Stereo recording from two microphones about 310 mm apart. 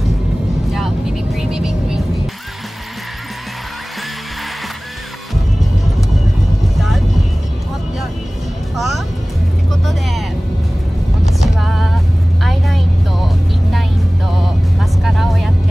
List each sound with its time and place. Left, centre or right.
0.7 s vehicle: centre
8.7 s music: centre
11.4 s vehicle: centre